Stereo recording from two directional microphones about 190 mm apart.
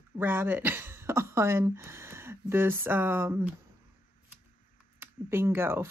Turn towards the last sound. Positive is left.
turn(degrees=-15)  # may be behind; listen again after turning